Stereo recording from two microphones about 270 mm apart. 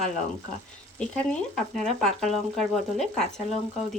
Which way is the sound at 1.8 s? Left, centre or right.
Centre.